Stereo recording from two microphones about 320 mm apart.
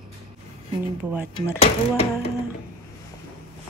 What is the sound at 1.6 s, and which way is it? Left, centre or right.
Speech, centre.